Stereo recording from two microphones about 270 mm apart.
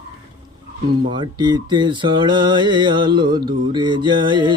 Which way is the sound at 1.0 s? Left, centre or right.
Centre.